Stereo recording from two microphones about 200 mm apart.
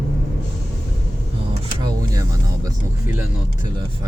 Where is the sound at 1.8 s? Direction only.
20° right (ahead or behind).